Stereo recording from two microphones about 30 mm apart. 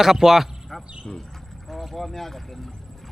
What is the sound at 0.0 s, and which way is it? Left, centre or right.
Speech, centre.